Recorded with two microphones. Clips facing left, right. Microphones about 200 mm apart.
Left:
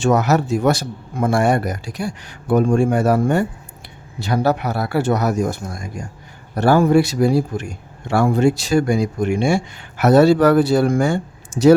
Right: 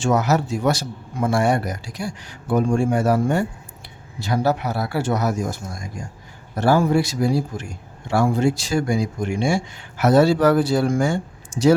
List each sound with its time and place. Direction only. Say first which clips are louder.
0.0 s a man's voice: left 3 dB; 60° left (ahead or behind)